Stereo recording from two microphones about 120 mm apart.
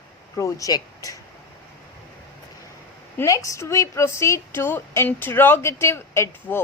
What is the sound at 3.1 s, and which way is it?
A woman's voice, 25° left (ahead or behind).